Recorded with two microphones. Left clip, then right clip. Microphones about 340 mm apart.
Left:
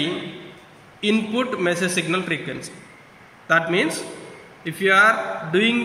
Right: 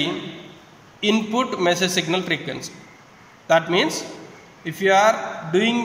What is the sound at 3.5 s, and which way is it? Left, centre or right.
A man's voice, right.